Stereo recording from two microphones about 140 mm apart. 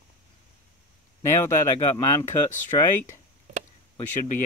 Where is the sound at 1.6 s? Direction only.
20° left (ahead or behind).